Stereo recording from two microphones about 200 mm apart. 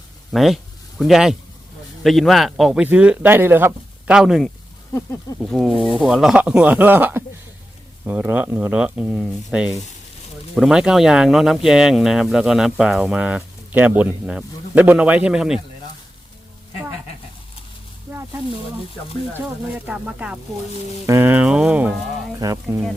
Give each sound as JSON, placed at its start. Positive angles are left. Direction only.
{"t": 0.3, "sound": "speech", "side_deg": 0}
{"t": 19.3, "sound": "speech", "side_deg": -10}
{"t": 22.4, "sound": "speech", "side_deg": -15}